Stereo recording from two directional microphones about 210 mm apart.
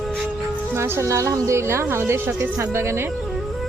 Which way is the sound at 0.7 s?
10° right (ahead or behind).